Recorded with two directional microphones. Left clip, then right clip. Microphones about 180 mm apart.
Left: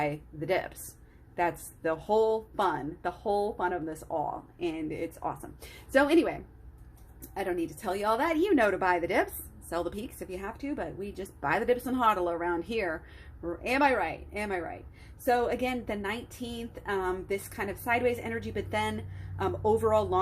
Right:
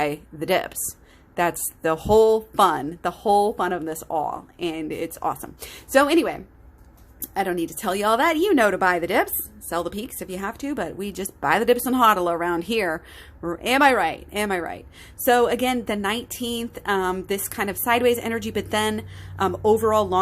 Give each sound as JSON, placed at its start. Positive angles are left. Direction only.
{"t": 0.0, "sound": "a woman's voice", "side_deg": -45}
{"t": 7.3, "sound": "a woman's voice", "side_deg": -45}